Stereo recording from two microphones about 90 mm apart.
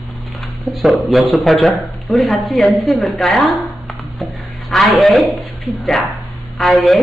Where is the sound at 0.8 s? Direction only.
Centre (ahead or behind).